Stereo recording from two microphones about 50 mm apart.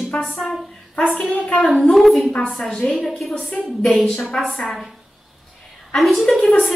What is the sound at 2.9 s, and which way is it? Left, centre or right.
Speech, centre.